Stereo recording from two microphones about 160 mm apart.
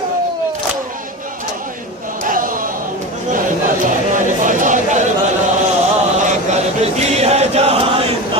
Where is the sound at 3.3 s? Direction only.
55° right (ahead or behind).